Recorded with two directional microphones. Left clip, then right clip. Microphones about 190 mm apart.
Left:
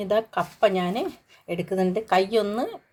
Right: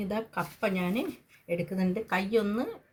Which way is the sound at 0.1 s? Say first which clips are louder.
Left 12 dB; 45° left (ahead or behind).